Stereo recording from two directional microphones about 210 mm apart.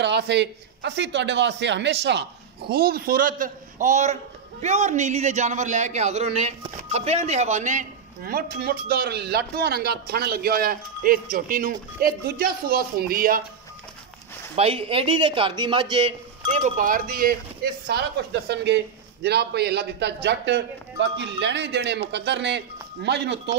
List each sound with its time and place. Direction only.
0.0 s a man's voice: 55° right (ahead or behind)
2.7 s a man's voice: 45° right (ahead or behind)
14.5 s a man's voice: 25° right (ahead or behind); by 23.5 s 55° right (ahead or behind)